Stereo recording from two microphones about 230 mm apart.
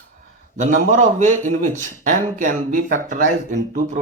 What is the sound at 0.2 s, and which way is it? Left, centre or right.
A man's voice, right.